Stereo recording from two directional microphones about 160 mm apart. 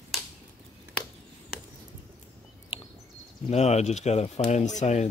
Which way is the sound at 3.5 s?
40° left (ahead or behind).